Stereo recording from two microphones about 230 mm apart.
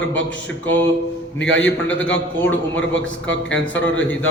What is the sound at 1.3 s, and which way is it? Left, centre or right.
Speech, left.